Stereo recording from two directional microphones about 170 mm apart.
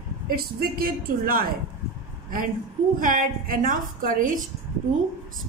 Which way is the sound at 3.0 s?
50° right (ahead or behind).